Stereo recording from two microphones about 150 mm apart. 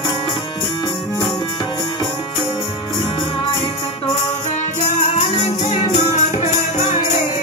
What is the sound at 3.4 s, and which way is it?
Music, 35° left (ahead or behind).